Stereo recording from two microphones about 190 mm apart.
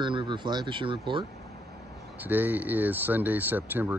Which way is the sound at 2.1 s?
10° right (ahead or behind).